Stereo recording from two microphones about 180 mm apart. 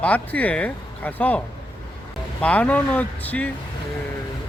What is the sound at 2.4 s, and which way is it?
Speech, 10° left (ahead or behind).